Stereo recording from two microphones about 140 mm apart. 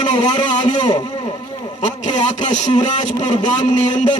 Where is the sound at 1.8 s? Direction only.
60° left (ahead or behind).